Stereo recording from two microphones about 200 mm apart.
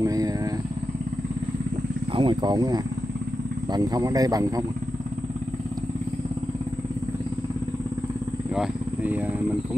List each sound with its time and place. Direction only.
0.0 s vehicle: 20° right (ahead or behind)
2.1 s speech: 25° right (ahead or behind)
8.5 s speech: 10° right (ahead or behind)